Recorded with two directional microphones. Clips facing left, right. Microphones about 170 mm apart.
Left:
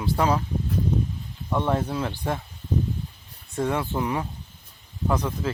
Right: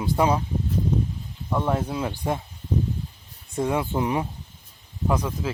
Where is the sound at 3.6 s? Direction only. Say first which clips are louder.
Right 1 dB; 15° right (ahead or behind).